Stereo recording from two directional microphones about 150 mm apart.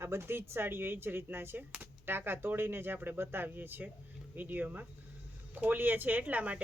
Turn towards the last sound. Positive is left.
turn(degrees=-10)  # may be behind; listen again after turning